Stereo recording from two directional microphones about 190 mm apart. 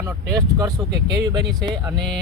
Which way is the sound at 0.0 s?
20° right (ahead or behind).